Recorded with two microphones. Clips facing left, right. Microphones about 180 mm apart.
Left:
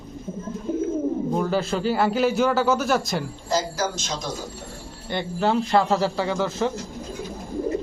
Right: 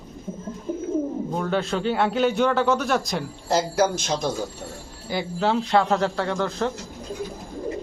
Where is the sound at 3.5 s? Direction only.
60° right (ahead or behind).